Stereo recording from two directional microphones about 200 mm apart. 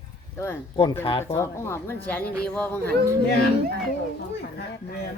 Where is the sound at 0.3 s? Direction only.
10° left (ahead or behind).